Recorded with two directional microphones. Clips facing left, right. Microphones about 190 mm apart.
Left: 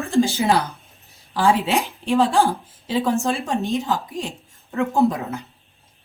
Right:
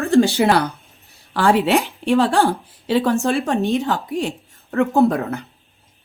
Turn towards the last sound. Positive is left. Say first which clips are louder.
# right 3 dB
turn(degrees=-60)  # may be behind; listen again after turning